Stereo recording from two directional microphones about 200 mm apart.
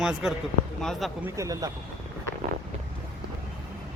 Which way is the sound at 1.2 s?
15° right (ahead or behind).